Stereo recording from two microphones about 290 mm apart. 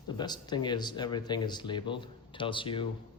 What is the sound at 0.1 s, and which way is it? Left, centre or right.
Speech, centre.